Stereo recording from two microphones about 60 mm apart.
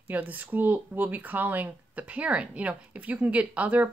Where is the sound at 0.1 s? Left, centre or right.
Right.